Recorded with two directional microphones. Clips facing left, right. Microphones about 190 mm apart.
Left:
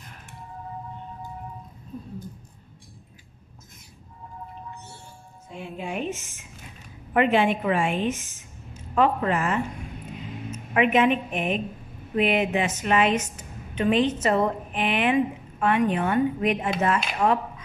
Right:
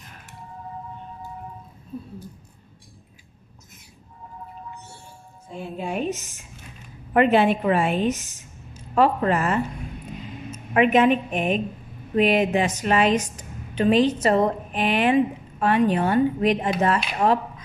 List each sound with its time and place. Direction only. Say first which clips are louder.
5.5 s a woman's voice: right 3 dB; 40° right (ahead or behind)